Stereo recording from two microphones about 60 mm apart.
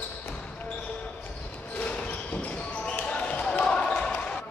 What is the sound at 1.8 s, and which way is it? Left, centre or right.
Basketball bounce, left.